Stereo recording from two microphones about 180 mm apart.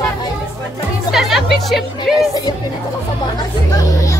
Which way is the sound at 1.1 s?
Centre (ahead or behind).